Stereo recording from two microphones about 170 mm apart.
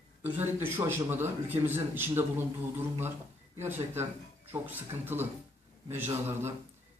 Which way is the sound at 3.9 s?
15° right (ahead or behind).